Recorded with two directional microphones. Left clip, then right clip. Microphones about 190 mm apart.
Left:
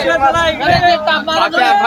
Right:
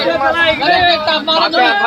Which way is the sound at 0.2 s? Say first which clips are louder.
Right 1 dB; 40° left (ahead or behind).